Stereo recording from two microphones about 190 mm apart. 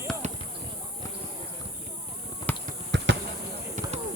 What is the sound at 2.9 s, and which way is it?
Basketball bounce, 70° right (ahead or behind).